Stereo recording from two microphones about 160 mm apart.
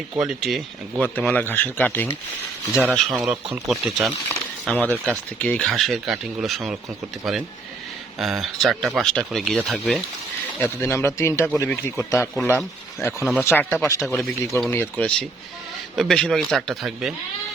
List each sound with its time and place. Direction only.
0.1 s speech: 5° right (ahead or behind)
1.0 s speech: 10° left (ahead or behind)
2.7 s speech: centre (ahead or behind)
8.2 s speech: centre (ahead or behind)
10.6 s speech: 15° left (ahead or behind); by 17.2 s centre (ahead or behind)